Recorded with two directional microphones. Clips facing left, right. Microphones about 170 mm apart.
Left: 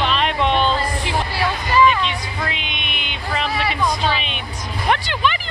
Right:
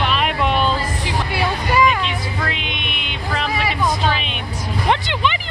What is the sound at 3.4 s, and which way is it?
Speech, 10° right (ahead or behind).